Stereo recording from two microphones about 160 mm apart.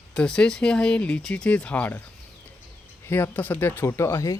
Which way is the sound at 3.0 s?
15° left (ahead or behind).